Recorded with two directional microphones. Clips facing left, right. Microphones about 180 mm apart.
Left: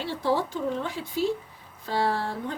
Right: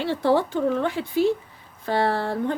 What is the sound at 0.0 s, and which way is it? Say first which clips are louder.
A woman's voice: right 5 dB; 65° right (ahead or behind).